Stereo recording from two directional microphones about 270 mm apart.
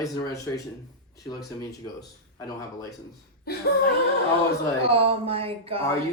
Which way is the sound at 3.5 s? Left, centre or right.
Left.